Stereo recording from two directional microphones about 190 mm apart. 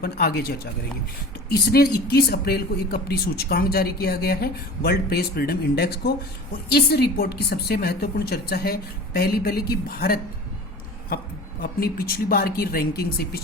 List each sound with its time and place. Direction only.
0.0 s a woman's voice: 55° left (ahead or behind)
11.6 s speech: 50° left (ahead or behind)